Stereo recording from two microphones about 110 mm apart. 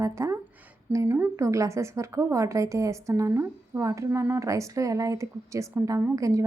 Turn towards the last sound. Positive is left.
turn(degrees=-30)  # may be behind; listen again after turning